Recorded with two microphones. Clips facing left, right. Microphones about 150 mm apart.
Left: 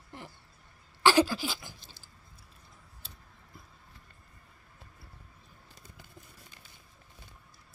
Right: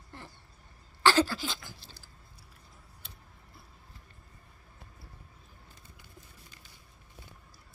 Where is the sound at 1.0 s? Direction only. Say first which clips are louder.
Left 1 dB; 15° left (ahead or behind).